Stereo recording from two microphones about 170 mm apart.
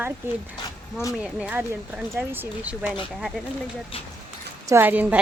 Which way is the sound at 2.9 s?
Centre (ahead or behind).